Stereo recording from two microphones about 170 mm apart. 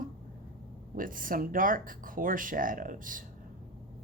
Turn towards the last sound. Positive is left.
turn(degrees=-50)  # may be behind; listen again after turning